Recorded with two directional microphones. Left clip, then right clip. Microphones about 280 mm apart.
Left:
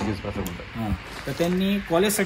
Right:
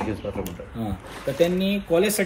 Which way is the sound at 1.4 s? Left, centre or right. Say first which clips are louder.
Right 3 dB; centre.